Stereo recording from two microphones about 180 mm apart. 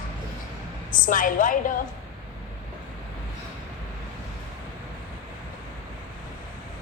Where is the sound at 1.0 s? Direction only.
50° left (ahead or behind).